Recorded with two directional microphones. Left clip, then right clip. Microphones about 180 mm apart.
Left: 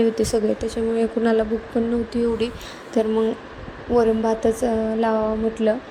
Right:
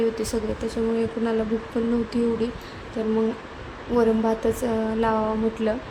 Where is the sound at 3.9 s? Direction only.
20° left (ahead or behind).